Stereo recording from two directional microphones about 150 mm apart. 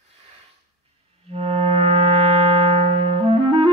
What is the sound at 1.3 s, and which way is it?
Music, 40° right (ahead or behind).